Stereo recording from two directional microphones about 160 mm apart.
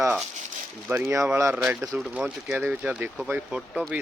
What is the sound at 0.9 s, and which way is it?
Speech, 15° right (ahead or behind).